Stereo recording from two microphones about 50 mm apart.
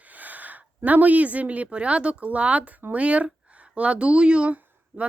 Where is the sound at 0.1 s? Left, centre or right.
Right.